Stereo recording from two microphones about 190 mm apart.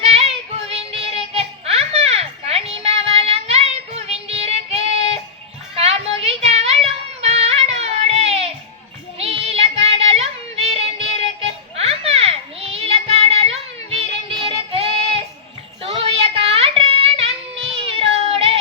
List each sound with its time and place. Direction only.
0.0 s child singing: 30° right (ahead or behind)